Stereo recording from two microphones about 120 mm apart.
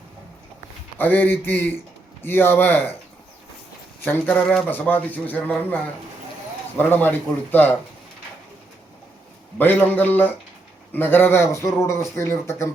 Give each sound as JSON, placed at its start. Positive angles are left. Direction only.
{"t": 0.9, "sound": "speech", "side_deg": 15}
{"t": 4.0, "sound": "speech", "side_deg": 15}
{"t": 9.6, "sound": "speech", "side_deg": 15}